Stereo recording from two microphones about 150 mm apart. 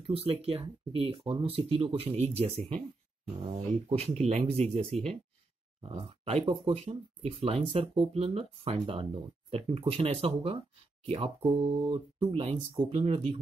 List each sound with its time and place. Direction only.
0.0 s speech: 40° right (ahead or behind)
3.9 s speech: 45° right (ahead or behind)